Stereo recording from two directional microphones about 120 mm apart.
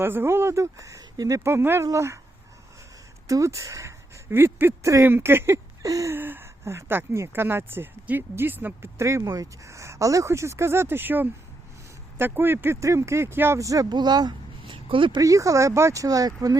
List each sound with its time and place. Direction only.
0.0 s speech: 20° right (ahead or behind)
1.5 s speech: 20° right (ahead or behind)
3.2 s speech: 25° right (ahead or behind); by 15.2 s 45° right (ahead or behind)
15.2 s speech: 25° right (ahead or behind)